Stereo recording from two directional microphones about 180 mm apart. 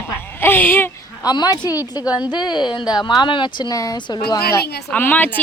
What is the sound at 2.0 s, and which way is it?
Speech, 5° right (ahead or behind).